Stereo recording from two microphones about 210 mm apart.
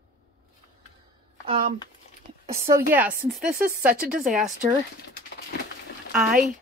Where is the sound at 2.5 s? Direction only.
15° right (ahead or behind).